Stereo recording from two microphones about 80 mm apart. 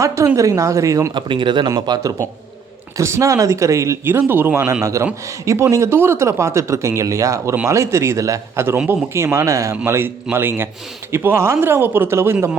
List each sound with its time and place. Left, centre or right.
0.0 s speech: right
1.1 s speech: right
1.7 s a man's voice: right
4.0 s speech: right
4.8 s speech: right
9.8 s speech: right